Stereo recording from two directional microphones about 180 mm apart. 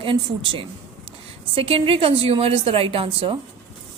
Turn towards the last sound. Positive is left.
turn(degrees=-30)  # may be behind; listen again after turning